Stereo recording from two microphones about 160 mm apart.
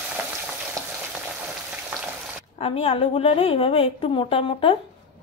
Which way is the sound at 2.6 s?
35° left (ahead or behind).